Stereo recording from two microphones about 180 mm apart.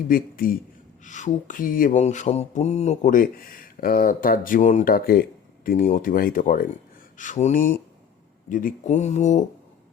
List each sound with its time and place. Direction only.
0.1 s mantra: 55° left (ahead or behind)
1.0 s mantra: 40° left (ahead or behind)
4.9 s speech: 55° left (ahead or behind)
5.6 s mantra: 45° left (ahead or behind)